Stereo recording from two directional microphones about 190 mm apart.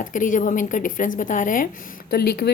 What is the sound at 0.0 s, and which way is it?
Speech, 45° left (ahead or behind).